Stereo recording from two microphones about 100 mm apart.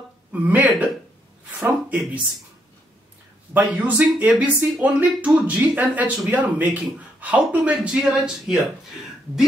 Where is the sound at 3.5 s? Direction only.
15° right (ahead or behind).